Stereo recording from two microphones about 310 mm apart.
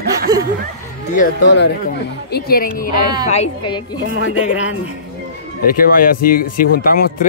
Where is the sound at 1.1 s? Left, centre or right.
Left.